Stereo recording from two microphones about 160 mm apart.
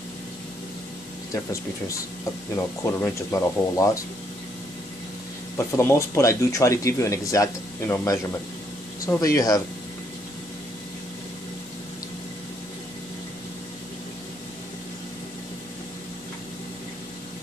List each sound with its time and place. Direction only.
1.3 s speech: 20° left (ahead or behind)
5.7 s speech: 15° left (ahead or behind)